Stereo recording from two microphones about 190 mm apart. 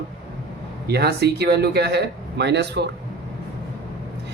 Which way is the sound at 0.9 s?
60° right (ahead or behind).